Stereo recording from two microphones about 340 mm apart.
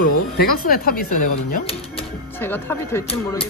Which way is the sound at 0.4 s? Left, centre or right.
Left.